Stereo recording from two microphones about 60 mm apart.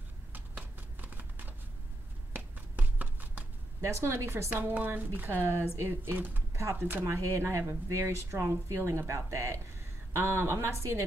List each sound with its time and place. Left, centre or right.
0.6 s shuffling cards: right
3.8 s speech: right
4.7 s speech: right
7.1 s speech: right